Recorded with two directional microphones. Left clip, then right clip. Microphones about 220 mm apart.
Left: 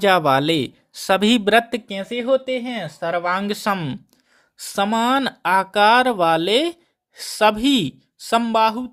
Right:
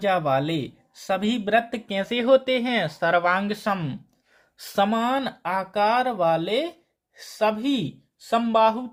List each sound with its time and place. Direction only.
0.0 s speech: 45° left (ahead or behind)
1.9 s speech: 10° left (ahead or behind)
3.3 s speech: 30° left (ahead or behind)
4.5 s speech: 15° left (ahead or behind)
4.9 s speech: 35° left (ahead or behind)